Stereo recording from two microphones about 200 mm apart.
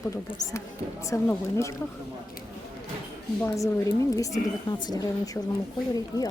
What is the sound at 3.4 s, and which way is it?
A woman's voice, 15° left (ahead or behind).